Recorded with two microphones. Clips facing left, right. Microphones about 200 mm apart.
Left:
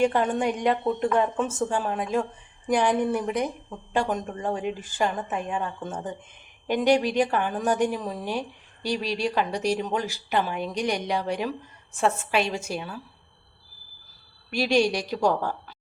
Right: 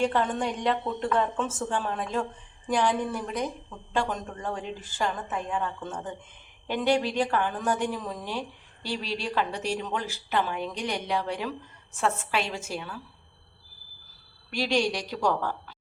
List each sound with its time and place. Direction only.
0.0 s a woman's voice: 15° left (ahead or behind)
14.5 s a woman's voice: 10° left (ahead or behind)